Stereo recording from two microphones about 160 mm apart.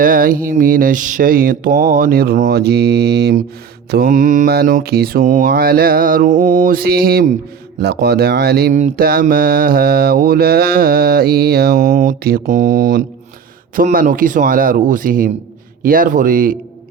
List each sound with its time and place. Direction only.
0.0 s mantra: 60° right (ahead or behind); by 3.4 s 90° right
3.9 s mantra: 60° right (ahead or behind)
4.4 s mantra: 70° right (ahead or behind)
7.8 s speech: 80° right
9.0 s mantra: 70° right (ahead or behind)